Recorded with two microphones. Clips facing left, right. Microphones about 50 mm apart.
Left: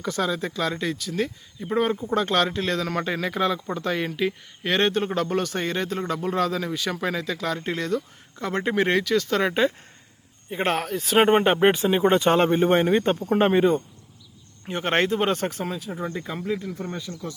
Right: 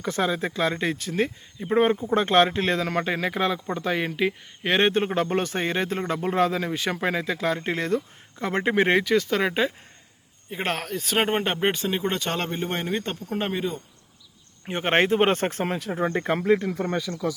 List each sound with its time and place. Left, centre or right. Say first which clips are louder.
0.0 s speech: right 1 dB; right
9.3 s speech: left 2 dB; centre; by 13.7 s left
14.7 s speech: right 1 dB; right
15.1 s speech: right 2 dB; right
15.8 s speech: right 5 dB; right